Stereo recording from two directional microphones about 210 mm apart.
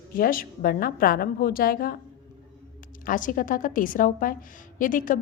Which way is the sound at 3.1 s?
40° left (ahead or behind).